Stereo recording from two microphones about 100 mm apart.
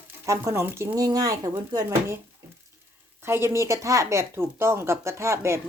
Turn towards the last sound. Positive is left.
turn(degrees=-30)  # may be behind; listen again after turning